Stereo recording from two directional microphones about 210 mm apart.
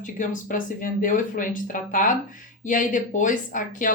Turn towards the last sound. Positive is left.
turn(degrees=40)  # may be behind; listen again after turning